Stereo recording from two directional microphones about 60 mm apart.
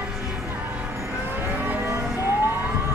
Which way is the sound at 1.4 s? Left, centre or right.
Right.